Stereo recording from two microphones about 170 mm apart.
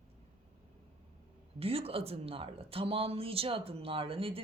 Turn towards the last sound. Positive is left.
turn(degrees=-30)  # may be behind; listen again after turning